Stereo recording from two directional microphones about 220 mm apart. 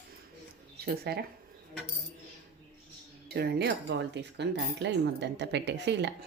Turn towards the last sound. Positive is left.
turn(degrees=-50)  # may be behind; listen again after turning